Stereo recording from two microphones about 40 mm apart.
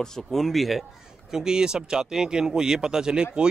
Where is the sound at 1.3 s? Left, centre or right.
Centre.